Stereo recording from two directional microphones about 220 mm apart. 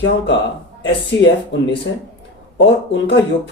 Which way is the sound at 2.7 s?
55° left (ahead or behind).